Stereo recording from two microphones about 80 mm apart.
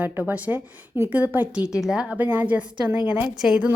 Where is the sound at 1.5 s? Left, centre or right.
Centre.